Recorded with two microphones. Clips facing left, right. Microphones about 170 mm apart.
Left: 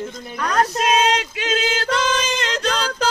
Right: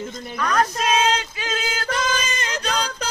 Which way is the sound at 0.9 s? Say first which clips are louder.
Left 1 dB; 75° left (ahead or behind).